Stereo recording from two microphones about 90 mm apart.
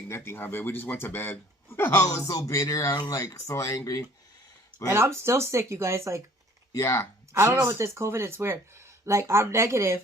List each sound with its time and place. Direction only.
0.1 s a man's voice: 25° left (ahead or behind)
2.0 s speech: 45° left (ahead or behind)
3.2 s speech: 35° left (ahead or behind)
4.9 s speech: 30° right (ahead or behind)
6.7 s speech: 35° left (ahead or behind)
7.3 s speech: 30° right (ahead or behind)